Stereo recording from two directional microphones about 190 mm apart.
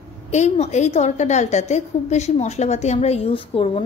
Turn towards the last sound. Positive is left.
turn(degrees=30)  # may be behind; listen again after turning